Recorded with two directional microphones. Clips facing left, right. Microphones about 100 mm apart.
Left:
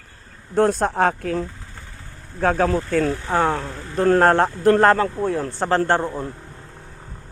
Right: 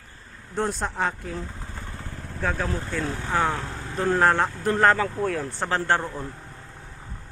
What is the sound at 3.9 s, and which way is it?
Speech, 50° left (ahead or behind).